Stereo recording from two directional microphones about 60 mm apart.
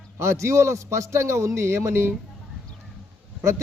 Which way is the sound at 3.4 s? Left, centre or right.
Right.